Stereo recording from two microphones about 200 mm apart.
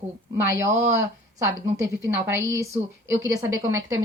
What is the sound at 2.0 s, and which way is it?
A woman's voice, 15° right (ahead or behind).